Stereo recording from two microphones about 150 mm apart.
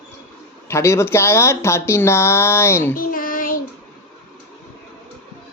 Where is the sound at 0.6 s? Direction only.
20° left (ahead or behind).